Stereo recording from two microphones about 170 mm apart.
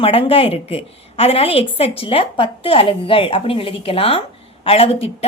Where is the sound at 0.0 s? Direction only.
35° left (ahead or behind).